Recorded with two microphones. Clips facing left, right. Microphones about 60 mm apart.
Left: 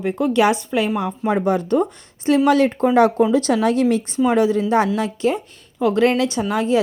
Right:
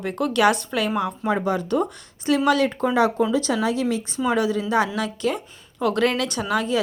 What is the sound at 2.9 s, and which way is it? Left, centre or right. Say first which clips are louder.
A woman's voice: left 5 dB; left.